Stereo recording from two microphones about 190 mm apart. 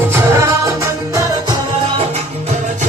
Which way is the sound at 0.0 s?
10° right (ahead or behind).